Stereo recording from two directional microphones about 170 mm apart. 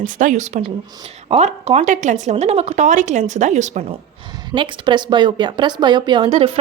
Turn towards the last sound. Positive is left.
turn(degrees=-35)  # may be behind; listen again after turning